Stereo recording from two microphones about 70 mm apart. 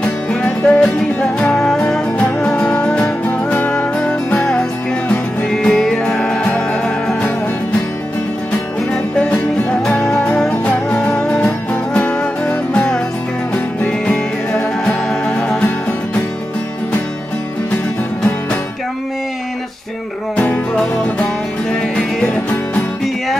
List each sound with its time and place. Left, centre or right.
0.0 s music: centre
5.5 s music: centre
9.8 s music: left
14.1 s music: centre
20.3 s music: centre